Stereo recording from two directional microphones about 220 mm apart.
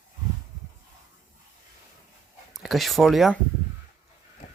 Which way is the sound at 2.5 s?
Centre (ahead or behind).